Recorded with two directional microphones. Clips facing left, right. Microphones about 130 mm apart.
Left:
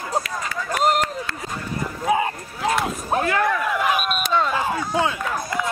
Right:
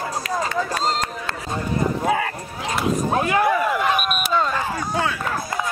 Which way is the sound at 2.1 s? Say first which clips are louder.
Left 4 dB; 20° left (ahead or behind).